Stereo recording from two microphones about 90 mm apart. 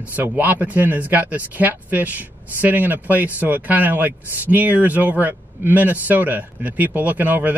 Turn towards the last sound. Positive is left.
turn(degrees=-20)  # may be behind; listen again after turning